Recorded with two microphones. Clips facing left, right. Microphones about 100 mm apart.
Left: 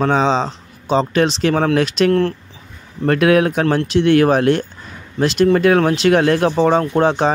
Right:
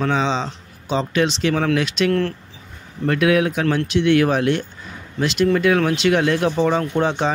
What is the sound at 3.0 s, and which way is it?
Speech, 45° left (ahead or behind).